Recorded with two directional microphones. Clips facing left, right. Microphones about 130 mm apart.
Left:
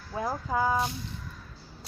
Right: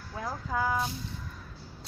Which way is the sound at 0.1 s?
25° left (ahead or behind).